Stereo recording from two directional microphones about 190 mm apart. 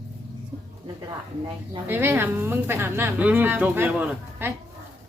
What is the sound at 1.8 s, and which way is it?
A woman's voice, 10° right (ahead or behind).